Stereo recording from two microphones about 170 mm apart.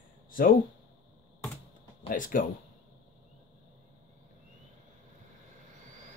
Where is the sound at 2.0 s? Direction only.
50° left (ahead or behind).